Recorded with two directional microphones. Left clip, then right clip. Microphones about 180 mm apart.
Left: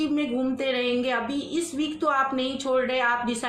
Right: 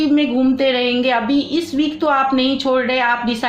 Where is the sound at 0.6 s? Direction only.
45° right (ahead or behind).